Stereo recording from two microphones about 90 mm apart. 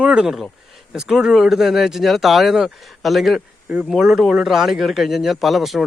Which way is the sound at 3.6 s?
15° right (ahead or behind).